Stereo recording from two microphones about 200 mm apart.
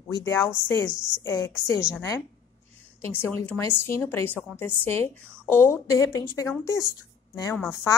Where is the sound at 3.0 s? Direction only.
10° left (ahead or behind).